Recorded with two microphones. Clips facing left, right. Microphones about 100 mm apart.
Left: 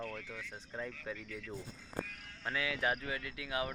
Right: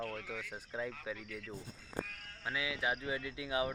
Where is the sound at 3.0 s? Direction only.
25° right (ahead or behind).